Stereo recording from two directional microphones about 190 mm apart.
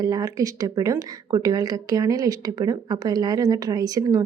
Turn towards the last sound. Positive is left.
turn(degrees=-20)  # may be behind; listen again after turning